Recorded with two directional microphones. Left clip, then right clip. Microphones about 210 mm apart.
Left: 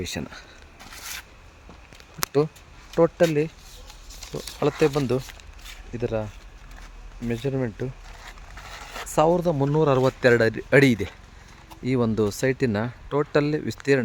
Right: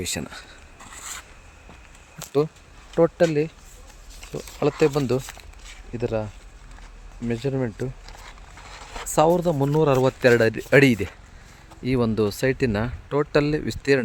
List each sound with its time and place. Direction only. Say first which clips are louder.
0.0 s speech: right 2 dB; centre (ahead or behind)
0.8 s a sound: left 1 dB; 55° left (ahead or behind)
2.9 s speech: right 1 dB; centre (ahead or behind)
4.3 s speech: right 1 dB; centre (ahead or behind)
8.2 s a sound: left 4 dB; 50° left (ahead or behind)
9.0 s speech: right 1 dB; 5° right (ahead or behind)